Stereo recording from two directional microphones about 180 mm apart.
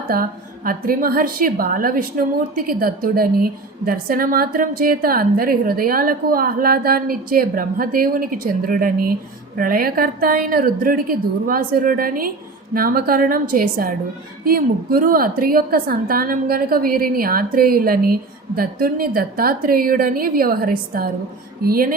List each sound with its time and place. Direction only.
0.1 s a woman's voice: 55° right (ahead or behind)